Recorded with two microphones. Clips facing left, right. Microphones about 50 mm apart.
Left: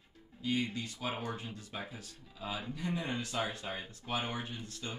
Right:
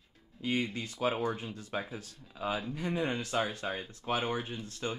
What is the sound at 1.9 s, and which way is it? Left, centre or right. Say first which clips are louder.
Speech: right 5 dB; right.